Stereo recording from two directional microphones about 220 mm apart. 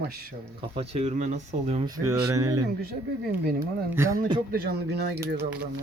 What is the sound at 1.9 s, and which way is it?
Speech, 15° right (ahead or behind).